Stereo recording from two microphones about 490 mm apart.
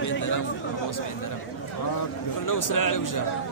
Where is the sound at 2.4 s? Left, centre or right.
Left.